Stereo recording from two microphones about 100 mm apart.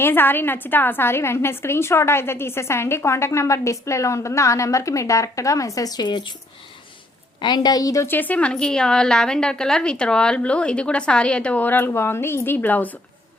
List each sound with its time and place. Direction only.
0.0 s a woman's voice: 20° left (ahead or behind); by 6.3 s 50° left (ahead or behind)
7.4 s a woman's voice: 45° left (ahead or behind)
8.0 s a woman's voice: 20° left (ahead or behind)